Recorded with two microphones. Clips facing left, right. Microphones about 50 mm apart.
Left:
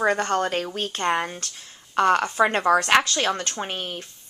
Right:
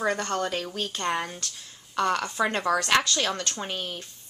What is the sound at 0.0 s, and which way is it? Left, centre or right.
A woman's voice, left.